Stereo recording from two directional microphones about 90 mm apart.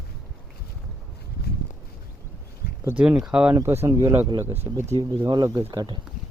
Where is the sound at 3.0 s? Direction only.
15° right (ahead or behind).